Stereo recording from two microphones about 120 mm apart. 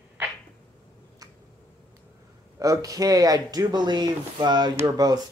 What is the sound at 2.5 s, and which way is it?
Speech, 30° right (ahead or behind).